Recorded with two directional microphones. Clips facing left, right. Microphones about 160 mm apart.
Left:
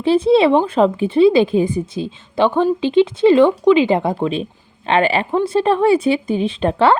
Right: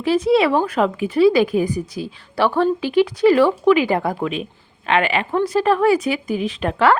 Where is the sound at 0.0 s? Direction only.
30° left (ahead or behind).